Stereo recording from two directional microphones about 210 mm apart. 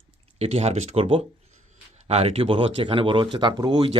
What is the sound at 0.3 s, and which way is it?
Speech, 30° right (ahead or behind).